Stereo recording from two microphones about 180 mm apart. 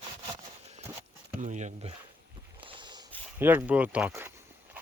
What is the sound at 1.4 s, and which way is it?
Speech, 40° right (ahead or behind).